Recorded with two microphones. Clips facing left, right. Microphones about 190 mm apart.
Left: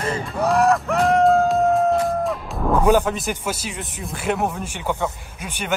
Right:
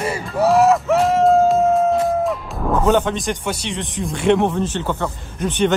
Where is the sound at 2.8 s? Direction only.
5° left (ahead or behind).